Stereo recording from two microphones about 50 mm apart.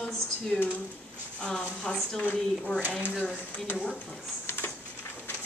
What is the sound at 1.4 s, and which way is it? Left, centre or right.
Speech, centre.